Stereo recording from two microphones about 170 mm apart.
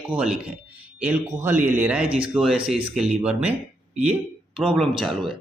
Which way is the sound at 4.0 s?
40° right (ahead or behind).